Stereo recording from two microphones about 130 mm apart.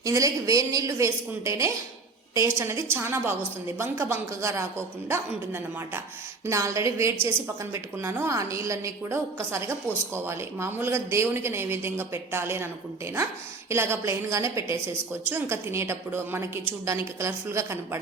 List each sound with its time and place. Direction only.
0.0 s a woman's voice: 25° right (ahead or behind)
13.7 s a woman's voice: 20° right (ahead or behind)